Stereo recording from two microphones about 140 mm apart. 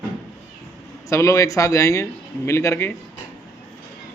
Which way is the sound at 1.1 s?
20° left (ahead or behind).